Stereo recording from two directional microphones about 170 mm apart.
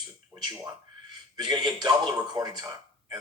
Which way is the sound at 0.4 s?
15° right (ahead or behind).